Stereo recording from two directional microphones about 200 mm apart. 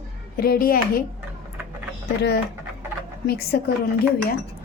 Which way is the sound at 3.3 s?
50° left (ahead or behind).